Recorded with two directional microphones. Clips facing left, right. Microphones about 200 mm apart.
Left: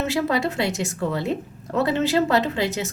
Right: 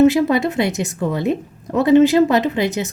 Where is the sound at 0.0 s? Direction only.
20° right (ahead or behind).